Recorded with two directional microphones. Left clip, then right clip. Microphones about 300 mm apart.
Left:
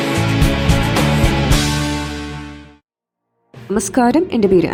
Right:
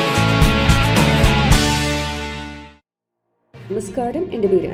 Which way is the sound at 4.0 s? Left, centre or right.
Left.